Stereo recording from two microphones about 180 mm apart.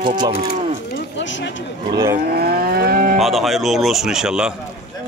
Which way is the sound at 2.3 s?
60° right (ahead or behind).